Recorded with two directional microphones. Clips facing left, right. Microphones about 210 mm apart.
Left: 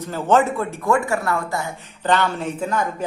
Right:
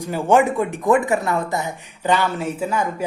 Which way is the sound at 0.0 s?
15° right (ahead or behind).